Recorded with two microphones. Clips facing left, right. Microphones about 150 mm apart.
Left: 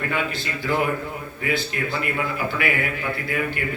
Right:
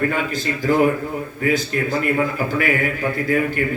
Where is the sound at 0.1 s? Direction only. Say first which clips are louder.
Right 4 dB; 40° right (ahead or behind).